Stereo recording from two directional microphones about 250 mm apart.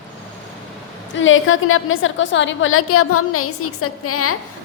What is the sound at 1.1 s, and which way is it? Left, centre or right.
A woman's voice, left.